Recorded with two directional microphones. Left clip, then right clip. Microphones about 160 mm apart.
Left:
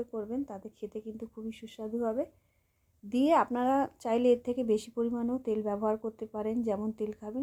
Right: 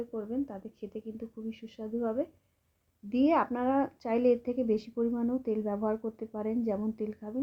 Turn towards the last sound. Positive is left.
turn(degrees=45)  # may be behind; listen again after turning